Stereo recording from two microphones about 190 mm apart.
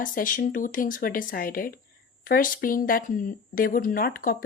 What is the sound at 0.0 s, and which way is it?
A woman's voice, 45° left (ahead or behind).